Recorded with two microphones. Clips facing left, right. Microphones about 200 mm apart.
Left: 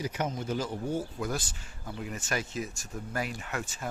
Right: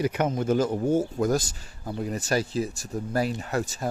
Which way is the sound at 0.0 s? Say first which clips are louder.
Right 8 dB; 60° right (ahead or behind).